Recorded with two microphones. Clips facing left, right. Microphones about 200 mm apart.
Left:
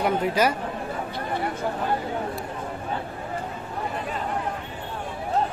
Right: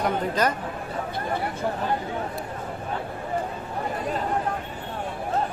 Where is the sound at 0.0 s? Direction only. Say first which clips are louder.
Left 2 dB; 10° left (ahead or behind).